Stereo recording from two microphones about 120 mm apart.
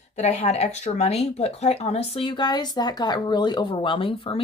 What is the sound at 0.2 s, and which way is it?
Speech, 65° left (ahead or behind).